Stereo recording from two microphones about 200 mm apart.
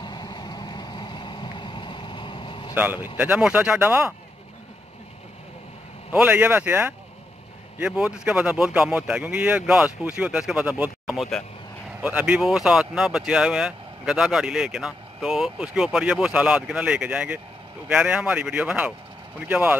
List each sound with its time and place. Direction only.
0.0 s vehicle: 20° left (ahead or behind)
2.7 s speech: 10° right (ahead or behind)
6.1 s speech: 5° right (ahead or behind)